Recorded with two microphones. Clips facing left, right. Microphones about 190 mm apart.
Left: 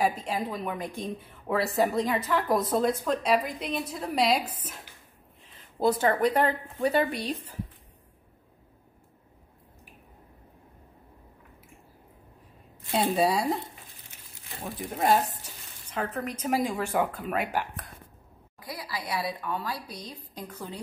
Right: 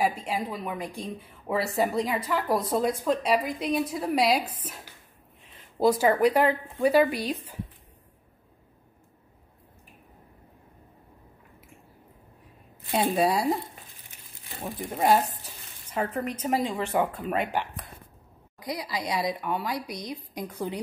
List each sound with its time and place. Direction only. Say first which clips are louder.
0.0 s a woman's voice: even; 5° right (ahead or behind)
5.9 s a woman's voice: right 3 dB; 10° right (ahead or behind)
12.9 s a woman's voice: right 1 dB; centre (ahead or behind)
15.9 s a woman's voice: right 3 dB; 5° right (ahead or behind)
18.6 s a woman's voice: right 5 dB; 20° right (ahead or behind)